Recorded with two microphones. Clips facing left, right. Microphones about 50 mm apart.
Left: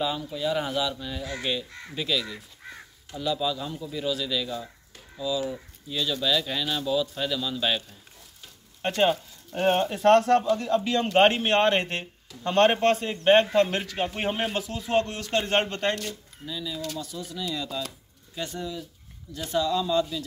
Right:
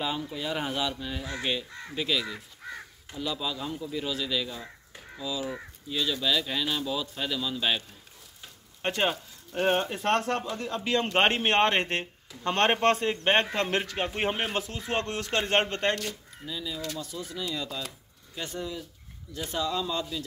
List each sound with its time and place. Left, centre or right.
0.0 s speech: right
8.8 s a man's voice: centre
14.6 s a man's voice: right
16.4 s speech: centre
18.5 s speech: right